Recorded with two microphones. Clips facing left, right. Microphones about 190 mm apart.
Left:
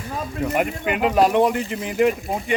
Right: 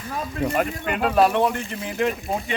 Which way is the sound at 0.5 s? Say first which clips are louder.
Left 2 dB; 10° left (ahead or behind).